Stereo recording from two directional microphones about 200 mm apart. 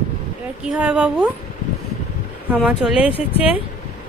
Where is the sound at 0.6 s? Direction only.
5° right (ahead or behind).